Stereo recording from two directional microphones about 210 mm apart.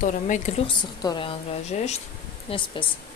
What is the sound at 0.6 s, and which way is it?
A woman's voice, 20° left (ahead or behind).